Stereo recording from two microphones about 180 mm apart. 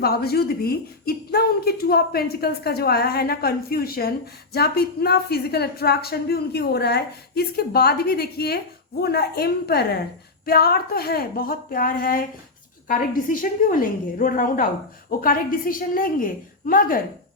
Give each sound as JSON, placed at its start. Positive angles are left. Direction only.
{"t": 0.0, "sound": "a woman's voice", "side_deg": 60}